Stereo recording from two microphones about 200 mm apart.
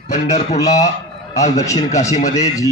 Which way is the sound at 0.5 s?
20° left (ahead or behind).